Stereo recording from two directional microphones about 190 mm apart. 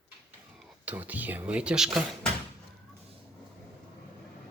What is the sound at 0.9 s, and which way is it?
Speech, 10° right (ahead or behind).